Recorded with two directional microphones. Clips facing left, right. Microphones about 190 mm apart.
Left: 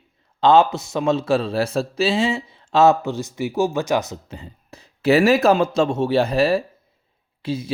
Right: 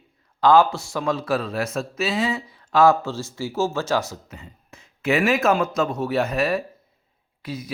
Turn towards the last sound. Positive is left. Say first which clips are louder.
# left 6 dB
turn(degrees=25)  # may be behind; listen again after turning